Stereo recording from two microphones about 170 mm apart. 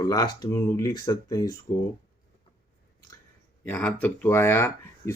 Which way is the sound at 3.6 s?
10° left (ahead or behind).